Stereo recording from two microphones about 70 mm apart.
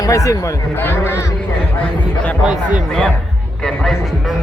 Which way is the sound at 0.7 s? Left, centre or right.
Left.